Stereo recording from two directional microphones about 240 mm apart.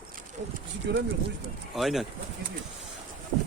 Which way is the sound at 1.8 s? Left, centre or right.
Centre.